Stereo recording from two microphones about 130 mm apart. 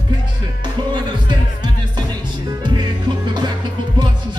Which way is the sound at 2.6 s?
35° right (ahead or behind).